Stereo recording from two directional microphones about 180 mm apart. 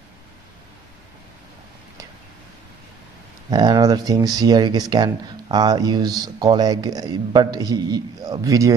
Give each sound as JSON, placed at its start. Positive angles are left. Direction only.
{"t": 3.4, "sound": "speech", "side_deg": -25}